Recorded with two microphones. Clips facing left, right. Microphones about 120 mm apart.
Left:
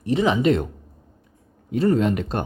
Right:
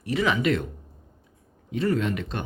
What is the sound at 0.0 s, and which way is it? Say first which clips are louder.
Speech: left 5 dB; 30° left (ahead or behind).